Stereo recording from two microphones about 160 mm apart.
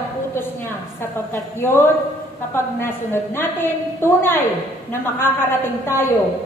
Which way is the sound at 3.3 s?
15° left (ahead or behind).